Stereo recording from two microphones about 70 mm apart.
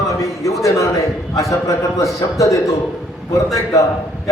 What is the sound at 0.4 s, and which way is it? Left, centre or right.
A man's voice, left.